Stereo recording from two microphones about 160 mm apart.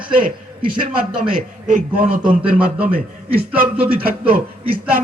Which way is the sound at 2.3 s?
10° right (ahead or behind).